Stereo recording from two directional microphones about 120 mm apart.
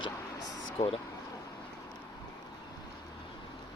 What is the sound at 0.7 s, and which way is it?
Speech, 55° left (ahead or behind).